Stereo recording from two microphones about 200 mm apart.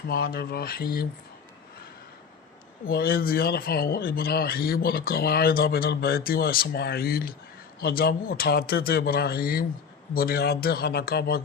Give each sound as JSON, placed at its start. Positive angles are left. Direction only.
{"t": 0.1, "sound": "a man's voice", "side_deg": 50}
{"t": 2.8, "sound": "a man's voice", "side_deg": 50}